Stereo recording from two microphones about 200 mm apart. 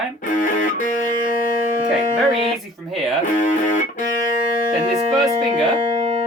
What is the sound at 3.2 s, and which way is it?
Music, 40° left (ahead or behind).